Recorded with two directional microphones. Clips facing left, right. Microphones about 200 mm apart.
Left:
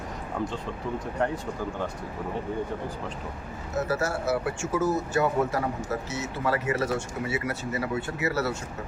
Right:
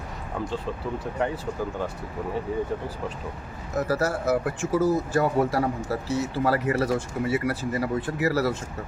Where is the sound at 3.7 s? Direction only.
35° right (ahead or behind).